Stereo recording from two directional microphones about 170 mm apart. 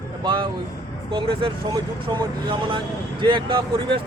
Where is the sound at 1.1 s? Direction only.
30° right (ahead or behind).